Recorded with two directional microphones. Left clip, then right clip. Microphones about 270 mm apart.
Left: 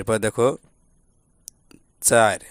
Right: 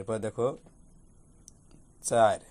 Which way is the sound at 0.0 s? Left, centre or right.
Left.